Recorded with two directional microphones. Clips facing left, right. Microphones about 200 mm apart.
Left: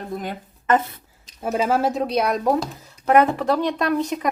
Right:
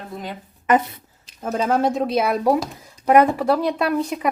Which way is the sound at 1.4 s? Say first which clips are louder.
Right 1 dB; 5° left (ahead or behind).